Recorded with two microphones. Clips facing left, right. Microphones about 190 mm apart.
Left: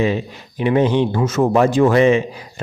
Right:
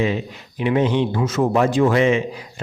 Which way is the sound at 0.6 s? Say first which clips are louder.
Left 3 dB; 40° left (ahead or behind).